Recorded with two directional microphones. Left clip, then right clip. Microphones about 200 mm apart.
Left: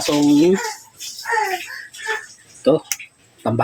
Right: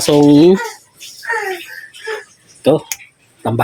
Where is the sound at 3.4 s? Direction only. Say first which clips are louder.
Right 2 dB; 15° right (ahead or behind).